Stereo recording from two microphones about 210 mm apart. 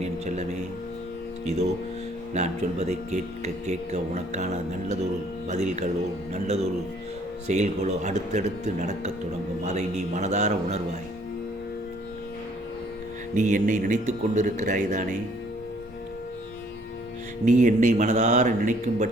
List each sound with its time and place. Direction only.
0.0 s a man's voice: 35° right (ahead or behind)
2.3 s a man's voice: 30° right (ahead or behind)
7.4 s a man's voice: 30° right (ahead or behind)
13.3 s a man's voice: 35° right (ahead or behind)
17.4 s a man's voice: 35° right (ahead or behind)